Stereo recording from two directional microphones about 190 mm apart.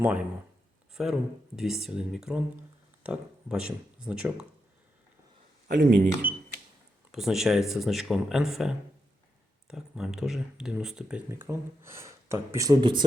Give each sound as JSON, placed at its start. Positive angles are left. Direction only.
{"t": 0.0, "sound": "speech", "side_deg": -10}
{"t": 5.6, "sound": "speech", "side_deg": -45}
{"t": 7.1, "sound": "speech", "side_deg": 0}